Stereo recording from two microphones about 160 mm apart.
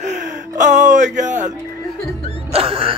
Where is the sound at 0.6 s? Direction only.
50° right (ahead or behind).